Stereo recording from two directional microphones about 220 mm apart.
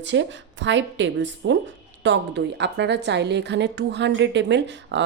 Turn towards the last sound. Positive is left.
turn(degrees=-55)  # may be behind; listen again after turning